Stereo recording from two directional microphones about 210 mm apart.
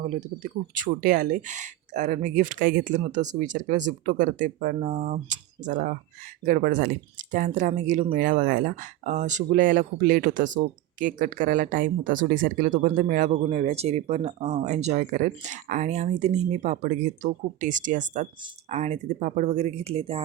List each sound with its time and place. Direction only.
0.4 s speech: 40° right (ahead or behind)